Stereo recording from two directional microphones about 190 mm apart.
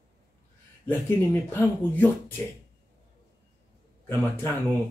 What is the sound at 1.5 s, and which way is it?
Speech, 10° left (ahead or behind).